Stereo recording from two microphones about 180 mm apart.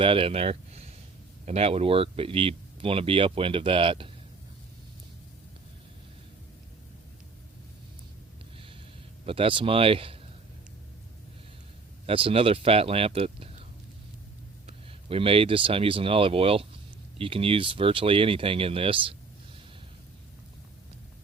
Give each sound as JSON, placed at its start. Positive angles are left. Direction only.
{"t": 0.0, "sound": "speech", "side_deg": -30}
{"t": 9.2, "sound": "speech", "side_deg": -30}
{"t": 12.0, "sound": "speech", "side_deg": -30}
{"t": 14.7, "sound": "speech", "side_deg": -30}